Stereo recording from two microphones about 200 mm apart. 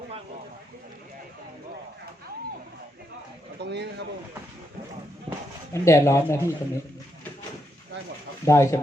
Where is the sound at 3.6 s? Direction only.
60° right (ahead or behind).